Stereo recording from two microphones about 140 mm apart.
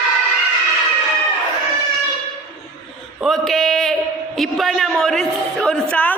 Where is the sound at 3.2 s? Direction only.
Centre (ahead or behind).